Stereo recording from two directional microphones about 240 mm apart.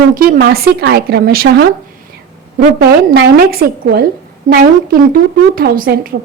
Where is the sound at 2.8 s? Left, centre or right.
Right.